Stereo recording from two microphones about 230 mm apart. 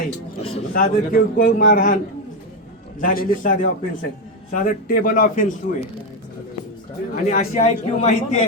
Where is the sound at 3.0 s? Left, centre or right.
Left.